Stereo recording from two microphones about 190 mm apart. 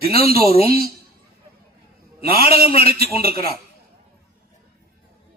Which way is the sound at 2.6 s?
30° left (ahead or behind).